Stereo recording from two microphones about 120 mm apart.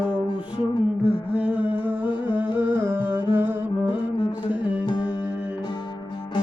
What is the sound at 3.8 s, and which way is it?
Music, 40° left (ahead or behind).